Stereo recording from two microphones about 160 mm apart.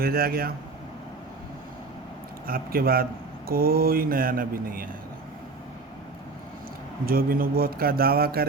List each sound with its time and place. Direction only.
0.0 s speech: 75° right (ahead or behind)
2.5 s speech: 70° right (ahead or behind)
7.0 s speech: 65° right (ahead or behind)